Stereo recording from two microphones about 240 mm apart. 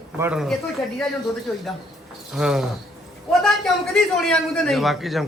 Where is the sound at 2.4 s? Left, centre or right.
Centre.